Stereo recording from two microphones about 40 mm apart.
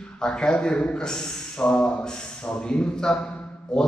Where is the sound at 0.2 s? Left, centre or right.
Centre.